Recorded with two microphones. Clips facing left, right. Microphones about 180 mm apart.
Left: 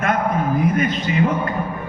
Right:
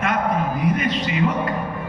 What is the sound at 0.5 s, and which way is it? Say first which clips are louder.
Speech: left 2 dB; 45° left (ahead or behind).